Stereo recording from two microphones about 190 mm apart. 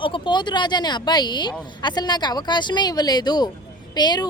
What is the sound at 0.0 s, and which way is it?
Speech, 25° left (ahead or behind).